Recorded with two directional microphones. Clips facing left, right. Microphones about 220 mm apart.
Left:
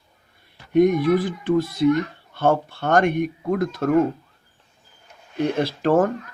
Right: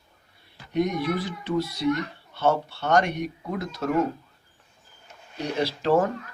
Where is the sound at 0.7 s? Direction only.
50° left (ahead or behind).